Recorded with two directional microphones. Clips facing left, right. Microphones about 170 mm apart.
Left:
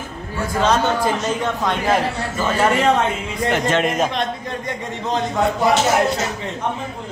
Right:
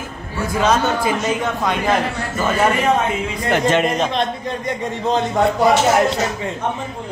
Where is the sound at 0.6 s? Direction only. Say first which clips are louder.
Even; 10° right (ahead or behind).